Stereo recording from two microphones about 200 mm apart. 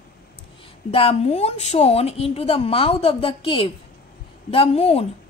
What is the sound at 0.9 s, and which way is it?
A woman's voice, 30° left (ahead or behind).